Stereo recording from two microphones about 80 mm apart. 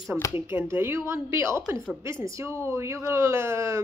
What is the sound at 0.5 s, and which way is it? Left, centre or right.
A woman's voice, right.